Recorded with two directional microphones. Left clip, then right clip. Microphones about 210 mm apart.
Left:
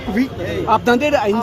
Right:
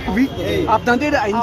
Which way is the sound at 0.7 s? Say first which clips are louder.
Left 3 dB; 60° left (ahead or behind).